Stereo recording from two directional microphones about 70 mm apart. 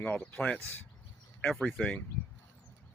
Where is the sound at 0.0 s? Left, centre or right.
Left.